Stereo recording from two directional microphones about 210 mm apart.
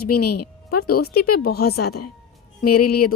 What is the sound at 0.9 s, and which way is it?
Speech, 45° left (ahead or behind).